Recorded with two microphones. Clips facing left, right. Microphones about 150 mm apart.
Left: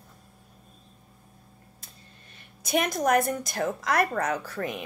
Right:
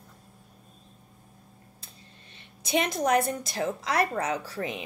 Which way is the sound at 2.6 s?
25° right (ahead or behind).